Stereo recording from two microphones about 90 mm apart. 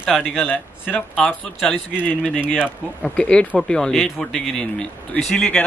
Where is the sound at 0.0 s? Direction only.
10° left (ahead or behind).